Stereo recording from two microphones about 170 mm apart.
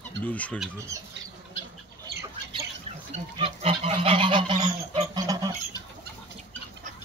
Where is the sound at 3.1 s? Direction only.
35° right (ahead or behind).